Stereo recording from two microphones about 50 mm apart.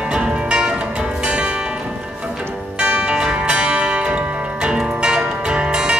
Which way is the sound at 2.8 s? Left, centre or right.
Right.